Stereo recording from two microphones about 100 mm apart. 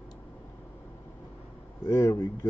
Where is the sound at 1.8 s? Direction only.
30° left (ahead or behind).